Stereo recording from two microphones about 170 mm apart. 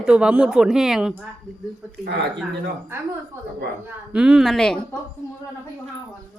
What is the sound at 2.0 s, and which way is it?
Speech, 90° right.